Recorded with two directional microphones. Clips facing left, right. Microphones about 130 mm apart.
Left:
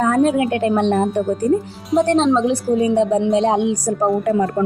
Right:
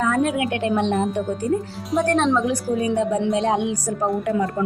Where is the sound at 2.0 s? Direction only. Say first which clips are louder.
Left 4 dB; 20° left (ahead or behind).